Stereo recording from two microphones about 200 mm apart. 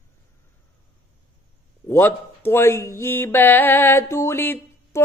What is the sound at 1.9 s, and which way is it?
Music, 10° left (ahead or behind).